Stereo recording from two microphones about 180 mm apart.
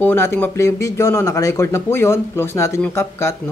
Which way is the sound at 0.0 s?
15° left (ahead or behind).